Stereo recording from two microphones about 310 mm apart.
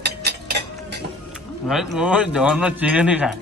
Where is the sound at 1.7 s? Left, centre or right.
Centre.